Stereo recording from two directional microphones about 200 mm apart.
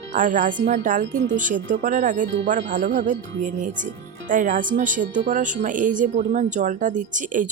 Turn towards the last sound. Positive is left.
turn(degrees=-40)  # may be behind; listen again after turning